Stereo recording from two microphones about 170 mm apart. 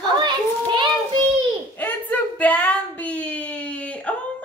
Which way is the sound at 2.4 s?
10° left (ahead or behind).